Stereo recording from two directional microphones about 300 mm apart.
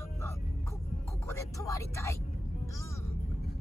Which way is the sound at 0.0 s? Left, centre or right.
Centre.